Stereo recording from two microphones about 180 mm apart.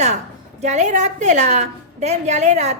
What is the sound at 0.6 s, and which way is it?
A woman's voice, 40° right (ahead or behind).